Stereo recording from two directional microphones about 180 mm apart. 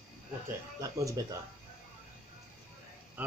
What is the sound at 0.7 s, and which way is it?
Speech, 20° right (ahead or behind).